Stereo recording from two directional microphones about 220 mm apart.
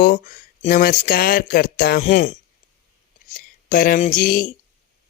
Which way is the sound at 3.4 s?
40° left (ahead or behind).